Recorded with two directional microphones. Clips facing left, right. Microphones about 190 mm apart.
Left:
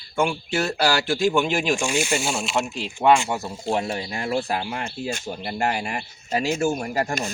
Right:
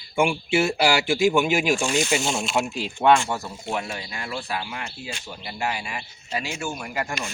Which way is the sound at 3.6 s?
35° left (ahead or behind).